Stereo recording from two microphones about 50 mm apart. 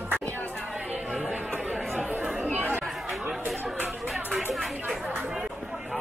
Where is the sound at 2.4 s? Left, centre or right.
Right.